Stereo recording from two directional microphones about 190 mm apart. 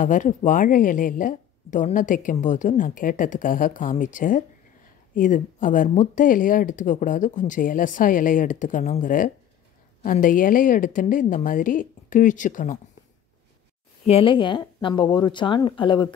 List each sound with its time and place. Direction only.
0.0 s speech: 40° left (ahead or behind)
14.0 s speech: 30° left (ahead or behind)